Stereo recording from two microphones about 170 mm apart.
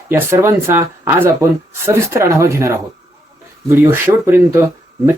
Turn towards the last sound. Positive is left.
turn(degrees=-15)  # may be behind; listen again after turning